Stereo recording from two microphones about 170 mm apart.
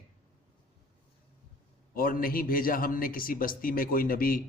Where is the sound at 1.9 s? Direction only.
55° left (ahead or behind).